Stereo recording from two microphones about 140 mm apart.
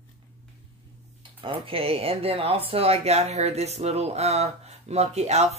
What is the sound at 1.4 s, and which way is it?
Speech, 40° right (ahead or behind).